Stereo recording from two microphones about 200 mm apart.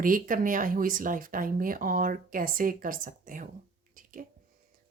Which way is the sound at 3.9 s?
40° right (ahead or behind).